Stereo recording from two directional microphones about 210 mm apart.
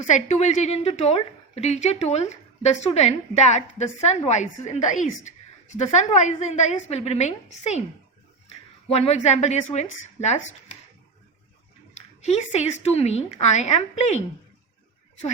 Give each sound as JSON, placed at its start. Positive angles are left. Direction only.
{"t": 0.1, "sound": "a woman's voice", "side_deg": 30}
{"t": 8.9, "sound": "a woman's voice", "side_deg": 30}
{"t": 12.2, "sound": "a woman's voice", "side_deg": 30}